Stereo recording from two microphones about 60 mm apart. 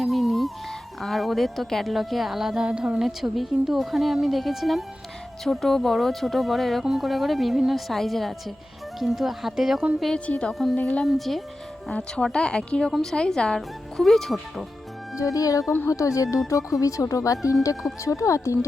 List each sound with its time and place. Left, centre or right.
0.0 s music: centre
1.0 s a woman's voice: centre
10.2 s a woman's voice: left
10.5 s a woman's voice: centre
11.9 s speech: centre
13.6 s a woman's voice: centre
15.1 s speech: left